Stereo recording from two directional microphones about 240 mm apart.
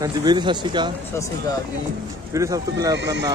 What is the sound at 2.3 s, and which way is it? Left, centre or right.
Speech, centre.